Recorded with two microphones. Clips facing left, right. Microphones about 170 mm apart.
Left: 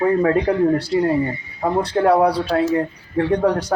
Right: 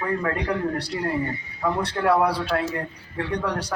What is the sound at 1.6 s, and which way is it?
A man's voice, 35° left (ahead or behind).